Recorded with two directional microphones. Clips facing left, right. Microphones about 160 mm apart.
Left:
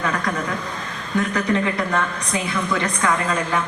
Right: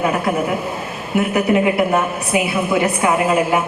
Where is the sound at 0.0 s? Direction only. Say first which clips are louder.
Right 6 dB; 25° right (ahead or behind).